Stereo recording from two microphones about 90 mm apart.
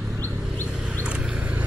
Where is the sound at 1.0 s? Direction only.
10° right (ahead or behind).